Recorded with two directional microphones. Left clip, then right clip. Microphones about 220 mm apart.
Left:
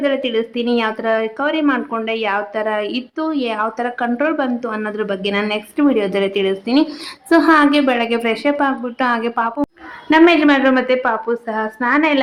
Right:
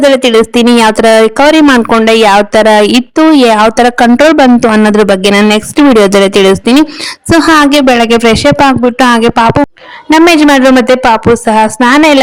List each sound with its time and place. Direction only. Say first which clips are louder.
0.0 s speech: right 13 dB; 50° right (ahead or behind)